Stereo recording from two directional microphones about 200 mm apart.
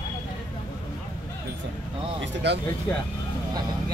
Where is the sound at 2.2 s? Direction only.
60° right (ahead or behind).